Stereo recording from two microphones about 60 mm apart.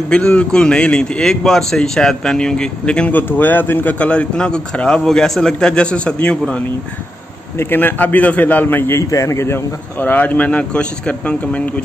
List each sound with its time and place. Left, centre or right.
0.1 s a man's voice: centre
3.1 s a man's voice: left
4.0 s a man's voice: left
7.5 s a man's voice: left
9.1 s a man's voice: left
9.9 s speech: left